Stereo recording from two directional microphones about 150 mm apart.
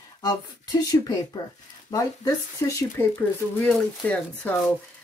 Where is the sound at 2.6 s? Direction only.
20° left (ahead or behind).